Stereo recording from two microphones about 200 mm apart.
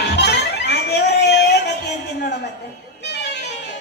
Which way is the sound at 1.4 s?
55° left (ahead or behind).